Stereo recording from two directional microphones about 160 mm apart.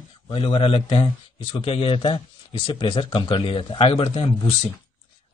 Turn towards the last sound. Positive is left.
turn(degrees=30)  # may be behind; listen again after turning